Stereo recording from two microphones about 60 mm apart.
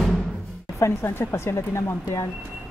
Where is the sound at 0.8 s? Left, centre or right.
Left.